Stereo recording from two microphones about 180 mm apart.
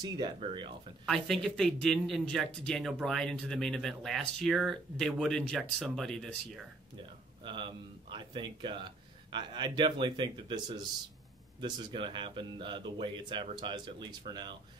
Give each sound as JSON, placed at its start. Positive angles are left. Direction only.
{"t": 0.0, "sound": "speech", "side_deg": -25}
{"t": 1.0, "sound": "speech", "side_deg": 0}
{"t": 7.4, "sound": "speech", "side_deg": -25}